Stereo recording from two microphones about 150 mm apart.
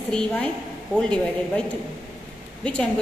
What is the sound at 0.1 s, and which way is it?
A woman's voice, 10° left (ahead or behind).